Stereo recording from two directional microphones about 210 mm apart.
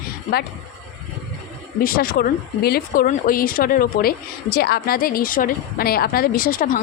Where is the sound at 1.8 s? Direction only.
45° left (ahead or behind).